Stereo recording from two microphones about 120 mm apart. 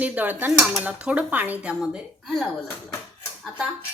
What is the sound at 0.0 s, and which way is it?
Speech, 15° right (ahead or behind).